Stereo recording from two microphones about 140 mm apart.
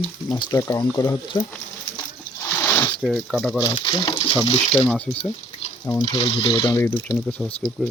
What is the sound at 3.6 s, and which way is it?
Speech, 30° left (ahead or behind).